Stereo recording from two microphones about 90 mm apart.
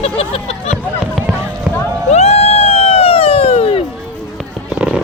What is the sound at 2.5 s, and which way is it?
Music, 90° left.